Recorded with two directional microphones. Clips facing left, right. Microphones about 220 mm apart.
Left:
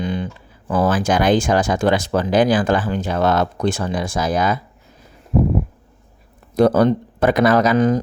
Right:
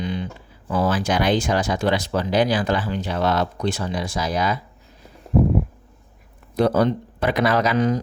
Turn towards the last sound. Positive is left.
turn(degrees=45)  # may be behind; listen again after turning